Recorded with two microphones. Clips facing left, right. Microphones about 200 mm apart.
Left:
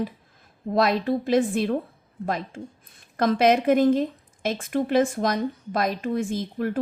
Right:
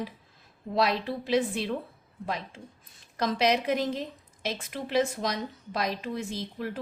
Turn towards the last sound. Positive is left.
turn(degrees=50)  # may be behind; listen again after turning